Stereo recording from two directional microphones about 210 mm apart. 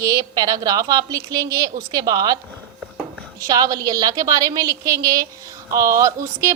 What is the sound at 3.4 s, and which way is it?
A woman's voice, 15° right (ahead or behind).